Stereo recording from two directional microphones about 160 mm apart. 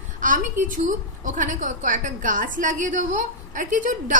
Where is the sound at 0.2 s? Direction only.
55° right (ahead or behind).